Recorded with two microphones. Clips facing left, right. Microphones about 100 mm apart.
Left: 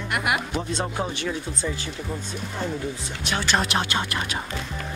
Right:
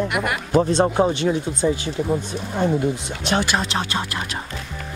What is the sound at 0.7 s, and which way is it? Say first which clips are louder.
Speech: right 10 dB; 30° right (ahead or behind).